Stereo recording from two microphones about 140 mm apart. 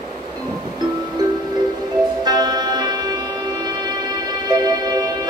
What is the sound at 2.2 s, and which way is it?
Music, 30° right (ahead or behind).